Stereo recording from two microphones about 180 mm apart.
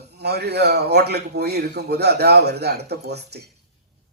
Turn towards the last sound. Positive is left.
turn(degrees=-65)  # may be behind; listen again after turning